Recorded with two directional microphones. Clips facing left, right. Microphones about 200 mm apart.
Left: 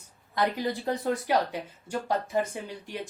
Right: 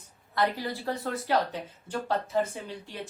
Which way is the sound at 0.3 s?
15° left (ahead or behind).